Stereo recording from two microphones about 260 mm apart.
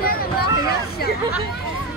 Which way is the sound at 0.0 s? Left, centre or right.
Left.